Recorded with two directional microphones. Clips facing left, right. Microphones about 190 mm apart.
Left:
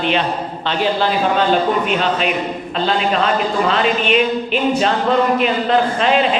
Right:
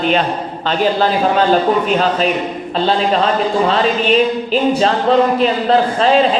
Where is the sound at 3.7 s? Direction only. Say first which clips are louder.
Right 2 dB; 35° right (ahead or behind).